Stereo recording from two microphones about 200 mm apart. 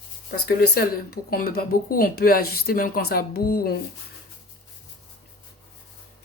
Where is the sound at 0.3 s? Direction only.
55° left (ahead or behind).